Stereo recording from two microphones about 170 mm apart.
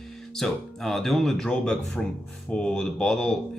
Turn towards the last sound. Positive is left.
turn(degrees=5)  # may be behind; listen again after turning